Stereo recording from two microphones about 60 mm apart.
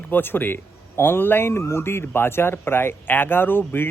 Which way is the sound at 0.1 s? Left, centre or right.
Left.